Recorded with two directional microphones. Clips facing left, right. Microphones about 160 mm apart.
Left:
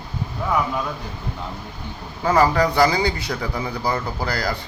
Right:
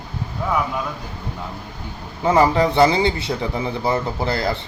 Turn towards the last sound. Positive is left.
turn(degrees=-25)  # may be behind; listen again after turning